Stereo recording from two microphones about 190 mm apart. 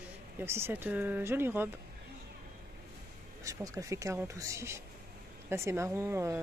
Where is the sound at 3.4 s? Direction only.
15° right (ahead or behind).